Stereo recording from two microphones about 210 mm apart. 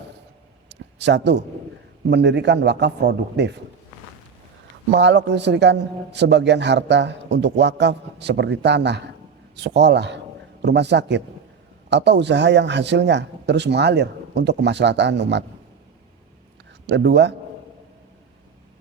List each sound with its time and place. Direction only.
0.7 s a sound: 55° right (ahead or behind)
2.0 s a man's voice: 55° right (ahead or behind)
4.9 s a man's voice: 55° right (ahead or behind)
16.8 s a man's voice: 55° right (ahead or behind)